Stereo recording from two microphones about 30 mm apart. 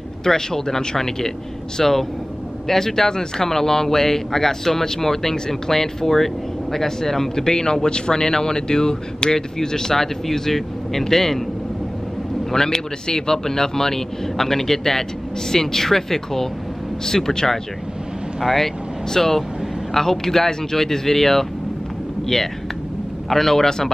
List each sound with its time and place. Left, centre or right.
0.2 s speech: centre
12.4 s speech: centre
18.4 s speech: centre
23.3 s speech: centre